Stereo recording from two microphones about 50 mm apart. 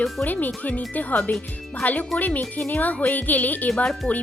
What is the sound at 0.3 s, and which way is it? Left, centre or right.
Speech, left.